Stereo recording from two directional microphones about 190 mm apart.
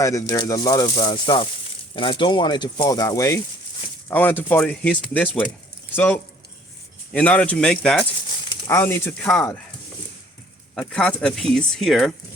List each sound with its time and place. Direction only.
0.0 s speech: 15° left (ahead or behind)
7.1 s speech: 5° left (ahead or behind)
8.4 s speech: 15° left (ahead or behind)
10.8 s speech: 5° left (ahead or behind)